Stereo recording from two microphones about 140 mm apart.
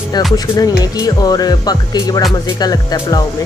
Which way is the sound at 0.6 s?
25° left (ahead or behind).